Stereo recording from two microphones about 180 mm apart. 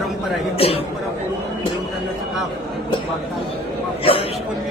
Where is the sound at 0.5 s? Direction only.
35° left (ahead or behind).